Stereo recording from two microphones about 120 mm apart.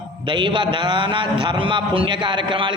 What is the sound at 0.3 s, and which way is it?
A man's voice, 40° right (ahead or behind).